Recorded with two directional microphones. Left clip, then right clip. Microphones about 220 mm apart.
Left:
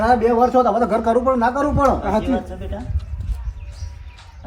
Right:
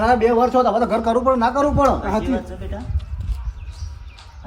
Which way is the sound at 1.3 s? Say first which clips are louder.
Right 1 dB; centre (ahead or behind).